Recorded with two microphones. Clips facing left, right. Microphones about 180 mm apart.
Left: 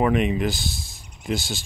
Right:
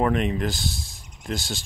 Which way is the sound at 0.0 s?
5° left (ahead or behind).